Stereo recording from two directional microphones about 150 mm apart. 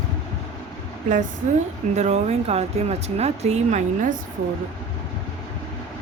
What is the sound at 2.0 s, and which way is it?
Speech, 50° right (ahead or behind).